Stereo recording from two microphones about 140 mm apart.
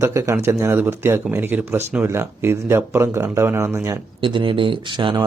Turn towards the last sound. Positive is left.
turn(degrees=-35)  # may be behind; listen again after turning